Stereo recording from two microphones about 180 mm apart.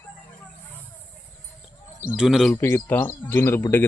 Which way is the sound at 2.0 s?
5° right (ahead or behind).